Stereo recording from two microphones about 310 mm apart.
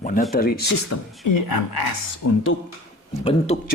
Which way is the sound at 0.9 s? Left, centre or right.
Left.